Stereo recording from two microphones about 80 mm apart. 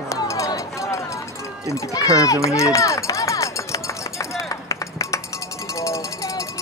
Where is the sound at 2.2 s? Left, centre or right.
Left.